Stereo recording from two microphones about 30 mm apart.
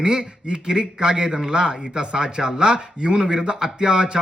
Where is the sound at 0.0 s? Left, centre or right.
Right.